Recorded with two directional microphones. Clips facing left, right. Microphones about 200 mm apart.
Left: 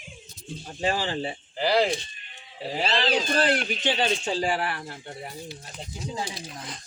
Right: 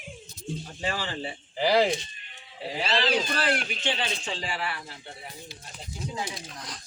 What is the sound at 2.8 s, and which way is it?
Speech, 25° left (ahead or behind).